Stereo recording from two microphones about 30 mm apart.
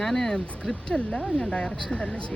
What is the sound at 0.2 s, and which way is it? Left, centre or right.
Speech, left.